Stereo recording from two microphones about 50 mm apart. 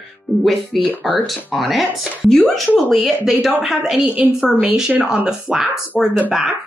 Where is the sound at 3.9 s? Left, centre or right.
Right.